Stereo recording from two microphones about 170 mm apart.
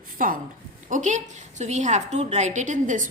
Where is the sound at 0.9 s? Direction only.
45° right (ahead or behind).